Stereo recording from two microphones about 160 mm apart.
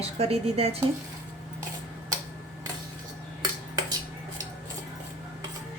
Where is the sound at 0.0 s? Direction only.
40° right (ahead or behind).